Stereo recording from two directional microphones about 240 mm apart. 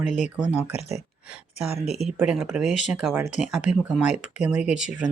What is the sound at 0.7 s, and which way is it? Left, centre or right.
Speech, left.